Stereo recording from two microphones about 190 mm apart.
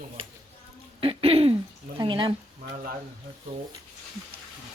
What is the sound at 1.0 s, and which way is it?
A woman's voice, 30° right (ahead or behind).